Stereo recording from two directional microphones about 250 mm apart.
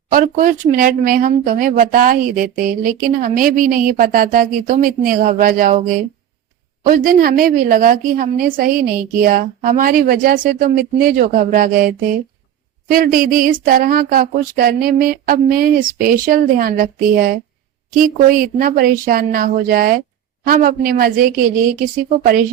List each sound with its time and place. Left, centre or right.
0.1 s speech: right
6.8 s speech: right